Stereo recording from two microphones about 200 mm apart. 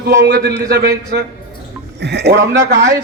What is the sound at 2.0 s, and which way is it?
Speech, 55° right (ahead or behind).